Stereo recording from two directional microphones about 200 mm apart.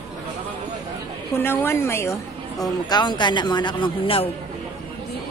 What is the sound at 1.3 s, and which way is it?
A woman's voice, 10° left (ahead or behind).